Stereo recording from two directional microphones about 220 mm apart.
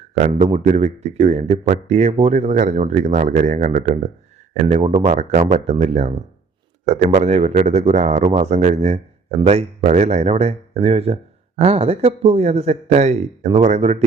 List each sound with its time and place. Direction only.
0.1 s speech: 30° right (ahead or behind)